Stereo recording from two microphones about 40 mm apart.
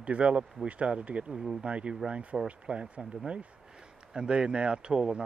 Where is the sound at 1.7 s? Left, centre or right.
Right.